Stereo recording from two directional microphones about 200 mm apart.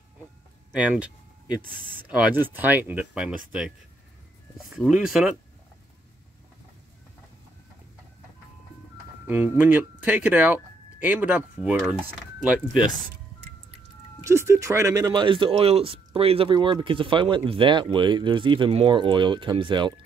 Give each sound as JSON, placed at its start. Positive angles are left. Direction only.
{"t": 0.7, "sound": "speech", "side_deg": -5}
{"t": 9.3, "sound": "speech", "side_deg": -10}
{"t": 14.2, "sound": "speech", "side_deg": -15}